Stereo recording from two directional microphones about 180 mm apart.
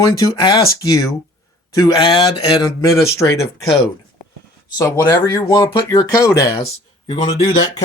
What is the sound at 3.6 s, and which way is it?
Speech, centre (ahead or behind).